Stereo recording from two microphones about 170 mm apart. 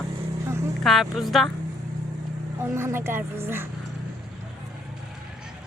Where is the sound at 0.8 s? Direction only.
Centre (ahead or behind).